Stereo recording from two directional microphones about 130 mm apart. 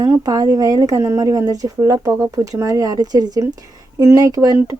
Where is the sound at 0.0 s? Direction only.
30° right (ahead or behind).